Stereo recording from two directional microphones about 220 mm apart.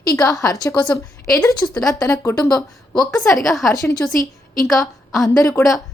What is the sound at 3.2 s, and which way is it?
Speech, centre (ahead or behind).